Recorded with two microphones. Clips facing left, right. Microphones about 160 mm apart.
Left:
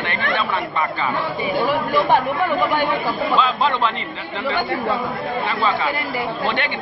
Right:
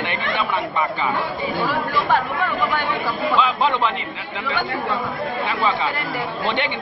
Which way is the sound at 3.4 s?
15° right (ahead or behind).